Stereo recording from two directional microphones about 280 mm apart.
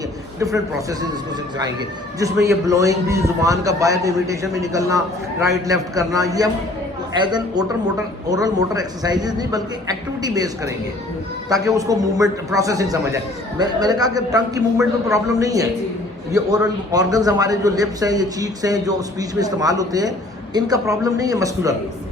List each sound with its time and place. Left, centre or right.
0.3 s a man's voice: centre
2.1 s a man's voice: centre